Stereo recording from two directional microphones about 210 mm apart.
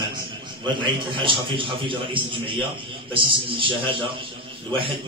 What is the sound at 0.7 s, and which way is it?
A man's voice, 25° right (ahead or behind).